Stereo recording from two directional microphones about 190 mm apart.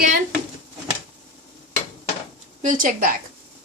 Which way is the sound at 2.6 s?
45° right (ahead or behind).